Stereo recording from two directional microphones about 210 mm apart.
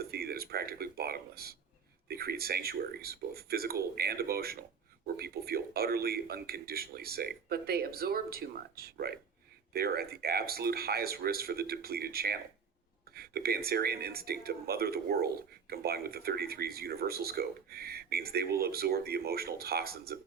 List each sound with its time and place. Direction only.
0.0 s speech: 45° right (ahead or behind)